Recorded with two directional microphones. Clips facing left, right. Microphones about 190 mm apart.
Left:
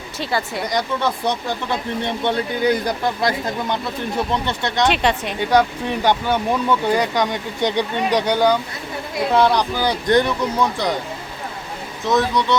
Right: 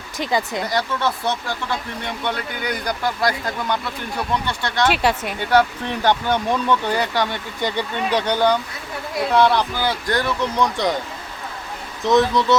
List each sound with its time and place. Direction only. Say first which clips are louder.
0.2 s speech: right 1 dB; 15° right (ahead or behind)
0.7 s speech: left 2 dB; 15° left (ahead or behind)
4.9 s speech: right 1 dB; 5° right (ahead or behind)
5.5 s speech: even; 15° left (ahead or behind)
12.0 s speech: right 2 dB; centre (ahead or behind)